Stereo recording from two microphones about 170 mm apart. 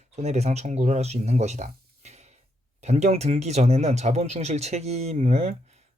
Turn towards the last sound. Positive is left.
turn(degrees=-40)  # may be behind; listen again after turning